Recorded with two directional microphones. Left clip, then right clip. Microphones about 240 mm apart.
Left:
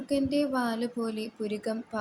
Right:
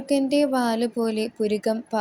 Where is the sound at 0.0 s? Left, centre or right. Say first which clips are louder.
Right 7 dB; right.